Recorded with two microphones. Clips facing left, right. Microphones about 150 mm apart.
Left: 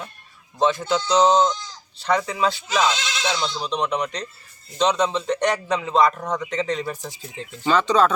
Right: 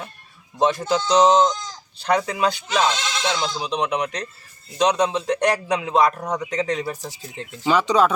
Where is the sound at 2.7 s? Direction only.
5° left (ahead or behind).